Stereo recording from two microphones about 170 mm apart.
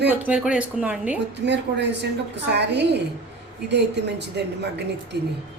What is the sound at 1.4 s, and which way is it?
A woman's voice, 90° right.